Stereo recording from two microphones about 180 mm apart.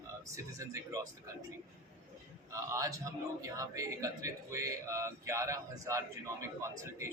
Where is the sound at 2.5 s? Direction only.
15° right (ahead or behind).